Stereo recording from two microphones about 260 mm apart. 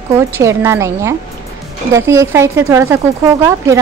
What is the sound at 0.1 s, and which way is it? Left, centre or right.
Speech, centre.